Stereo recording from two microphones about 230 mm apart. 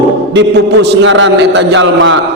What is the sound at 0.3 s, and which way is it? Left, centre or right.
A man's voice, right.